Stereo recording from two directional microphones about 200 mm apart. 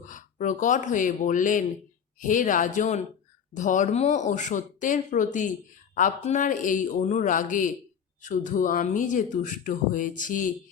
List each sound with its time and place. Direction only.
0.0 s speech: 40° left (ahead or behind)